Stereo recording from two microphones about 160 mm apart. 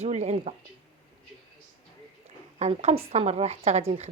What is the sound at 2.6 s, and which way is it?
A woman's voice, 45° right (ahead or behind).